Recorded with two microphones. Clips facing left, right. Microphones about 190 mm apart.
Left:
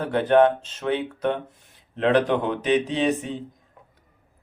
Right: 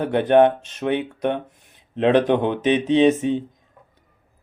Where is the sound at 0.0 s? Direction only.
20° right (ahead or behind).